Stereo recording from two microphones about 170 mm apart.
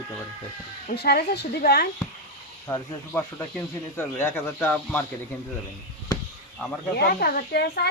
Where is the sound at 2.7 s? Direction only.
15° left (ahead or behind).